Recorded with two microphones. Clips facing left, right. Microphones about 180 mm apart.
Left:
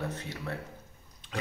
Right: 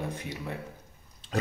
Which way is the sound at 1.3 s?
40° right (ahead or behind).